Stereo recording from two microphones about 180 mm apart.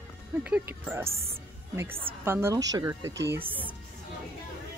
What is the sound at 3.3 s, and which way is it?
Speech, 10° right (ahead or behind).